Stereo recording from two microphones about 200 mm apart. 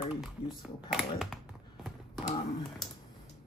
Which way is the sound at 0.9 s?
Centre (ahead or behind).